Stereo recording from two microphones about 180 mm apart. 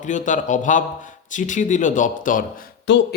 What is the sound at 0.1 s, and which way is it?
Speech, 45° left (ahead or behind).